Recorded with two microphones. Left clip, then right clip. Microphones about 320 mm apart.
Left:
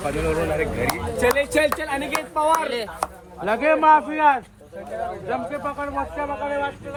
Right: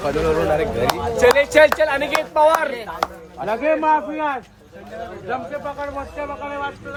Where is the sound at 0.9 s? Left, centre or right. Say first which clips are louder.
Right 8 dB; right.